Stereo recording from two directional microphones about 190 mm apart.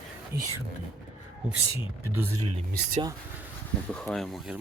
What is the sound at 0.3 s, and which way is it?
Speech, 15° right (ahead or behind).